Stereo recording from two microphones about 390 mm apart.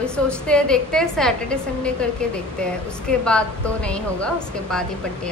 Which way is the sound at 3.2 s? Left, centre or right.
Centre.